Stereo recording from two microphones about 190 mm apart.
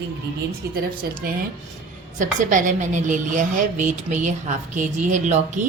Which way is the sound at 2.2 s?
40° right (ahead or behind).